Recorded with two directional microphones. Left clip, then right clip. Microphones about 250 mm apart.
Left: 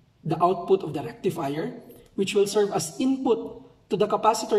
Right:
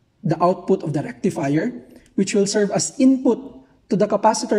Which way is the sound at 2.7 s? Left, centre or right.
Right.